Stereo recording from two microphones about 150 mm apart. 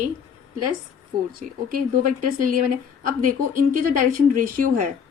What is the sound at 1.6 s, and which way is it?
A woman's voice, 70° right (ahead or behind).